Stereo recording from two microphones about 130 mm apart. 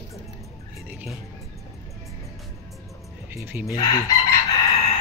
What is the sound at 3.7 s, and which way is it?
Chicken, 25° left (ahead or behind).